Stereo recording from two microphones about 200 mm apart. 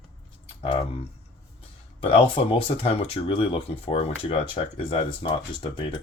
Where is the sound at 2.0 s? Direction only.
25° left (ahead or behind).